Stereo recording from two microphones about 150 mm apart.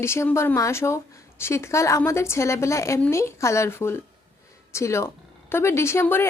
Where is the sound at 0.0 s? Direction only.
15° left (ahead or behind).